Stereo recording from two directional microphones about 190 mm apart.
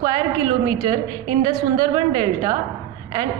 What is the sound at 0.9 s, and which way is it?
A woman's voice, 25° right (ahead or behind).